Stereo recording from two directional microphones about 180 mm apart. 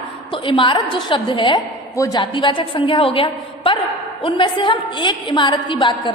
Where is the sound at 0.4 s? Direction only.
30° left (ahead or behind).